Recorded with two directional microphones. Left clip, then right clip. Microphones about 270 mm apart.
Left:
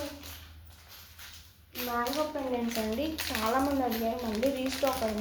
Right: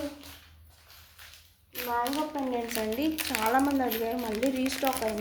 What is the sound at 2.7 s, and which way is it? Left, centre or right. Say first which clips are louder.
Speech: right 2 dB; right.